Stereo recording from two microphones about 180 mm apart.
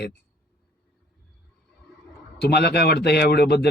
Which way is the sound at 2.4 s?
60° left (ahead or behind).